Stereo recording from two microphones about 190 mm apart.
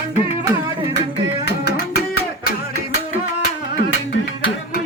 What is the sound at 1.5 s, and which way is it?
Music, 55° left (ahead or behind).